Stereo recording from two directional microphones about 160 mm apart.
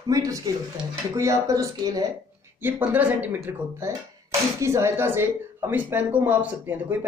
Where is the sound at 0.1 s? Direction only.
20° right (ahead or behind).